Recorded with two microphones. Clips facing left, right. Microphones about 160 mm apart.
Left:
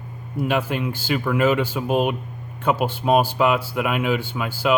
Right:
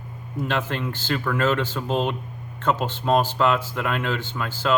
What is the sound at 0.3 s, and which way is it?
Speech, 10° left (ahead or behind).